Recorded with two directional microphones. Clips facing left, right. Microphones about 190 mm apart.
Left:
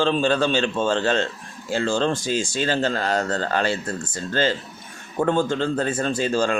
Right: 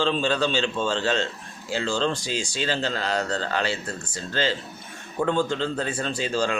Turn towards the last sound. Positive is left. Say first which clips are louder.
# left 4 dB
turn(degrees=50)  # may be behind; listen again after turning